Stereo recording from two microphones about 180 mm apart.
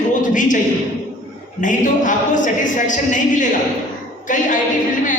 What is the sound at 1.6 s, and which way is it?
A woman's voice, 45° left (ahead or behind).